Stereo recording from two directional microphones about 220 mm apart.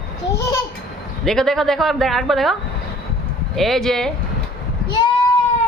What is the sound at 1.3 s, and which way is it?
A woman's voice, centre (ahead or behind).